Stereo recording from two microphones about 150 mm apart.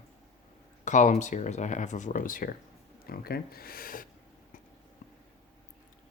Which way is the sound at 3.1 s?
90° left.